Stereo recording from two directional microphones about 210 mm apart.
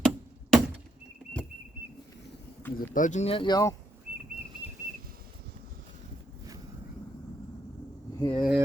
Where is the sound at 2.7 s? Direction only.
40° left (ahead or behind); by 3.8 s 15° left (ahead or behind).